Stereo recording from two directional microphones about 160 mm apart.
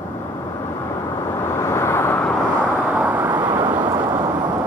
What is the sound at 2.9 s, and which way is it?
Vehicle, 10° right (ahead or behind).